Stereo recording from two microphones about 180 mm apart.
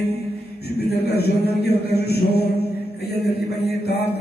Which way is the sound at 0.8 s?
60° left (ahead or behind).